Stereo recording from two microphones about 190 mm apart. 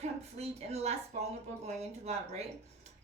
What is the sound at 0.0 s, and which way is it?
A woman's voice, 35° right (ahead or behind).